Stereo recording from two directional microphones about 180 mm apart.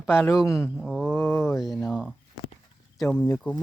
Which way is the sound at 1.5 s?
Centre (ahead or behind).